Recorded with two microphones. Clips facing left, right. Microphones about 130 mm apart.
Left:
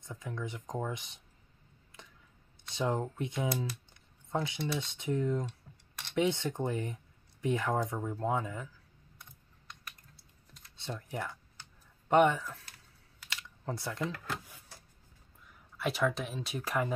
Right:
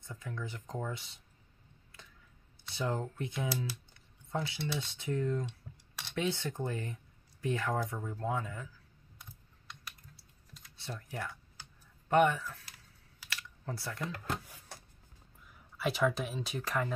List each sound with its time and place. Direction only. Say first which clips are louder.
0.0 s speech: left 2 dB; 15° left (ahead or behind)
2.7 s speech: left 3 dB; 20° left (ahead or behind)
10.8 s speech: left 3 dB; 20° left (ahead or behind)
13.3 s computer keyboard: left 3 dB; 20° left (ahead or behind)
15.4 s speech: even; centre (ahead or behind)